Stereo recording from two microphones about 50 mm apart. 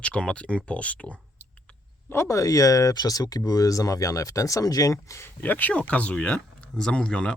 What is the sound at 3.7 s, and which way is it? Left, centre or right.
Speech, left.